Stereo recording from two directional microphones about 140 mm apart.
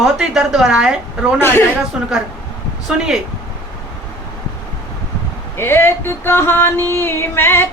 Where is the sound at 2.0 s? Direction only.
5° right (ahead or behind).